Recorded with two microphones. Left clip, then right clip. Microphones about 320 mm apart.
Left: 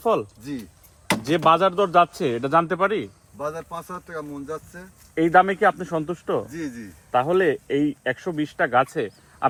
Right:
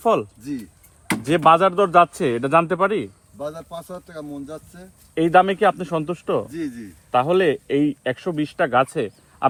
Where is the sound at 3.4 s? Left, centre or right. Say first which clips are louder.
Left 1 dB; centre.